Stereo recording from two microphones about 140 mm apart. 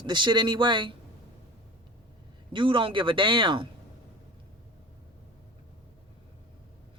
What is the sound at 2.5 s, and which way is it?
Speech, 35° right (ahead or behind).